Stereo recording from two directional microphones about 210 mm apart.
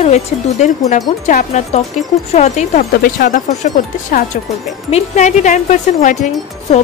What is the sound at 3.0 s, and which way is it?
Speech, 45° left (ahead or behind).